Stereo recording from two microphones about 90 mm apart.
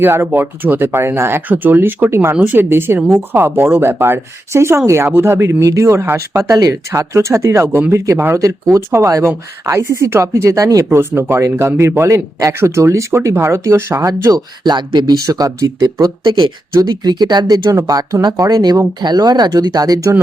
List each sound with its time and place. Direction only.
0.0 s speech: 25° right (ahead or behind)
2.3 s speech: 15° right (ahead or behind)
8.4 s speech: 35° right (ahead or behind)
10.9 s speech: 25° right (ahead or behind)
14.1 s speech: 45° right (ahead or behind)
16.2 s speech: 55° right (ahead or behind)